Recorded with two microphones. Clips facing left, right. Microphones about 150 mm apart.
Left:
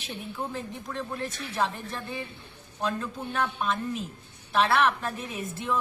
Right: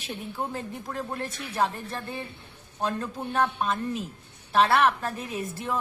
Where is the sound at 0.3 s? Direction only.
40° right (ahead or behind).